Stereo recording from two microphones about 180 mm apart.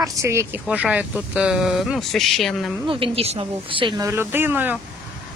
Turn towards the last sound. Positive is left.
turn(degrees=-10)  # may be behind; listen again after turning